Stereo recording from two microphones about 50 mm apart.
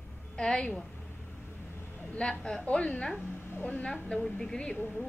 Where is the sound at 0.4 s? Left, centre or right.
Centre.